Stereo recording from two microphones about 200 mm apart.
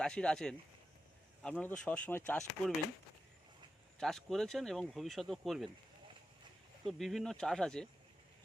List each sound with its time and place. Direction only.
0.0 s speech: 5° left (ahead or behind)
3.9 s speech: centre (ahead or behind)
6.8 s speech: centre (ahead or behind)